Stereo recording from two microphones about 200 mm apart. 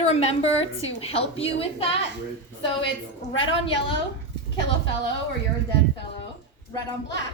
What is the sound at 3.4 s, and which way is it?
Speech, 25° left (ahead or behind).